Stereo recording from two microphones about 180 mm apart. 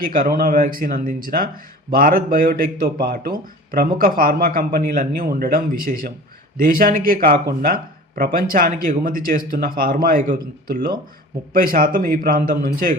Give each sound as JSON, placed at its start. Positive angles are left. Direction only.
{"t": 0.0, "sound": "a man's voice", "side_deg": -50}